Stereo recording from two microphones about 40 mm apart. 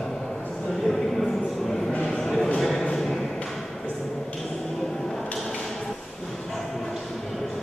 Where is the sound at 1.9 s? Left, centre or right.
Left.